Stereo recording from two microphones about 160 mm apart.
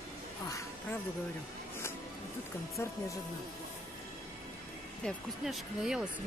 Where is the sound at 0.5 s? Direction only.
20° left (ahead or behind).